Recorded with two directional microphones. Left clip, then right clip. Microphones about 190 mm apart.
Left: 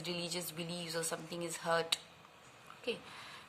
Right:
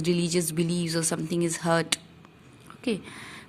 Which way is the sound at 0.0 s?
35° right (ahead or behind).